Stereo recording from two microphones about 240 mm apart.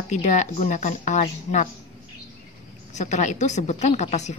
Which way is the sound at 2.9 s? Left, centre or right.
Left.